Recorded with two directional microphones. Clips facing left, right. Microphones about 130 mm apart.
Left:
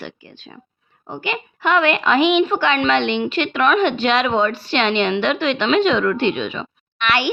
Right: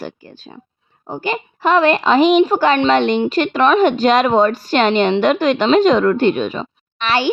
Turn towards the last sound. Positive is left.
turn(degrees=-30)  # may be behind; listen again after turning